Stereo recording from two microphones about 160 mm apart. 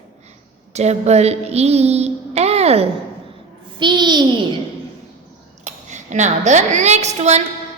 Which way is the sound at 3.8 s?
30° right (ahead or behind).